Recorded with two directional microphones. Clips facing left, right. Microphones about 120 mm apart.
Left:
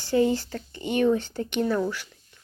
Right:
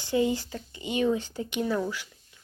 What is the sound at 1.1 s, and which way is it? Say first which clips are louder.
Speech: left 3 dB; 15° right (ahead or behind).